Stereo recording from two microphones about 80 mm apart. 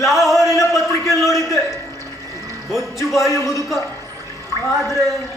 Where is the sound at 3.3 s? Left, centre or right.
Left.